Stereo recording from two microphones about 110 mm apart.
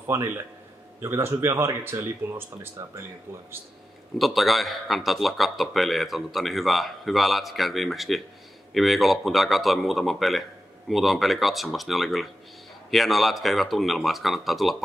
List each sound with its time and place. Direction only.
0.0 s a man's voice: 20° right (ahead or behind)
4.2 s speech: centre (ahead or behind)